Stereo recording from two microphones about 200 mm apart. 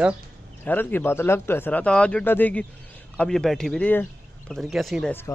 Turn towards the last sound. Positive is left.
turn(degrees=0)  # may be behind; listen again after turning